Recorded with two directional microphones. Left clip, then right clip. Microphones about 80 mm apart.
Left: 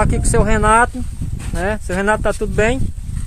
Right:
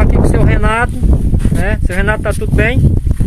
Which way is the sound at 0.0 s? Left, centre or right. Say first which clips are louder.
Right 2 dB; centre.